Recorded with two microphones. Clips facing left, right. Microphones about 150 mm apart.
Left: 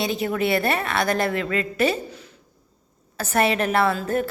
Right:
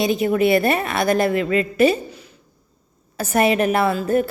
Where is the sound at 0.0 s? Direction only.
15° right (ahead or behind).